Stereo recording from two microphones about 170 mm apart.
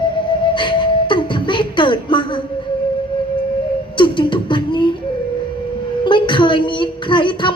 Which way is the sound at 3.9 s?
30° left (ahead or behind).